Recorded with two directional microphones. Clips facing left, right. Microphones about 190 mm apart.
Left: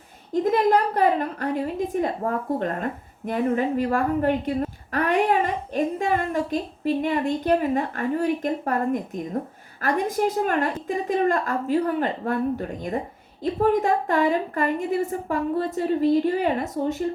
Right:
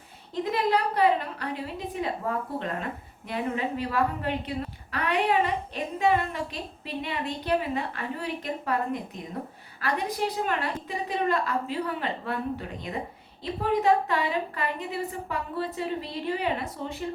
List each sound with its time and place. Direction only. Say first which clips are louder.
0.4 s a woman's voice: left 6 dB; 45° left (ahead or behind)